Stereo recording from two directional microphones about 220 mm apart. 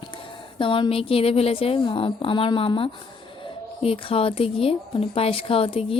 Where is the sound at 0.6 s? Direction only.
25° left (ahead or behind).